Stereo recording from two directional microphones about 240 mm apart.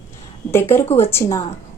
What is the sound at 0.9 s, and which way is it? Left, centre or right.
Speech, left.